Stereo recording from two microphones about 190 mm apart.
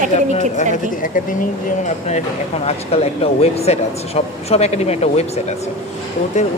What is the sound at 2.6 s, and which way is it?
Speech, 30° left (ahead or behind).